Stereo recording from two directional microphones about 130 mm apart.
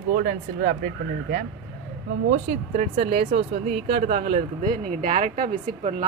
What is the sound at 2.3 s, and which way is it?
Speech, 65° right (ahead or behind).